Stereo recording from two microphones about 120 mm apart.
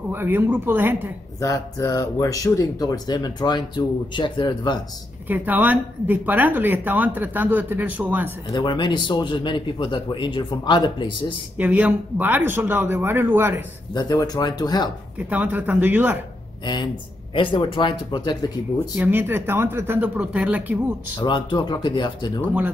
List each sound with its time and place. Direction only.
0.1 s a woman's voice: 15° right (ahead or behind)
1.4 s speech: 25° left (ahead or behind)
5.3 s a woman's voice: 15° right (ahead or behind)
8.5 s speech: 40° left (ahead or behind)
11.5 s a woman's voice: 15° right (ahead or behind)
13.9 s speech: 35° left (ahead or behind)
15.2 s a woman's voice: 15° right (ahead or behind)
17.3 s speech: 45° left (ahead or behind)
18.9 s a woman's voice: 15° right (ahead or behind)
21.2 s speech: 40° left (ahead or behind)